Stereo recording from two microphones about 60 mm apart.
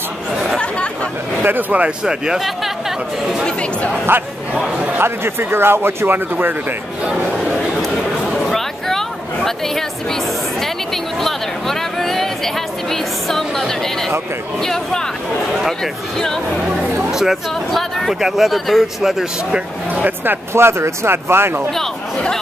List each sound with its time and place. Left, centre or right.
1.4 s speech: right
2.0 s speech: centre
4.1 s speech: right
7.5 s a sound: centre
14.6 s speech: centre
17.0 s speech: centre
19.9 s speech: right
20.5 s speech: right
21.7 s chatter: centre